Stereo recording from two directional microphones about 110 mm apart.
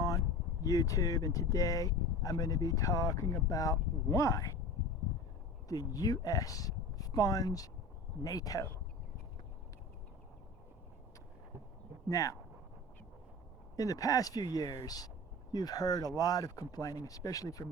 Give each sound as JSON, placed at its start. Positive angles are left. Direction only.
{"t": 0.6, "sound": "speech", "side_deg": 30}
{"t": 5.6, "sound": "speech", "side_deg": 35}
{"t": 12.0, "sound": "speech", "side_deg": 30}
{"t": 13.7, "sound": "speech", "side_deg": 35}